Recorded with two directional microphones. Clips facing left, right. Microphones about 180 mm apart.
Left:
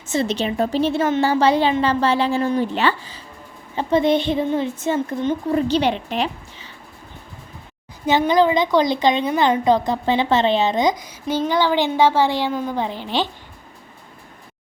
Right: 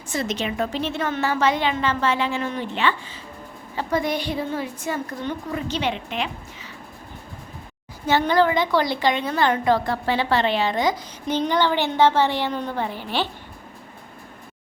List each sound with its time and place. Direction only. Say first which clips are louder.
0.1 s a woman's voice: left 5 dB; 30° left (ahead or behind)
3.8 s a woman's voice: left 7 dB; 25° left (ahead or behind)
5.5 s a woman's voice: left 7 dB; 35° left (ahead or behind)
8.0 s a woman's voice: left 3 dB; 15° left (ahead or behind)
12.9 s a woman's voice: left 2 dB; 10° right (ahead or behind)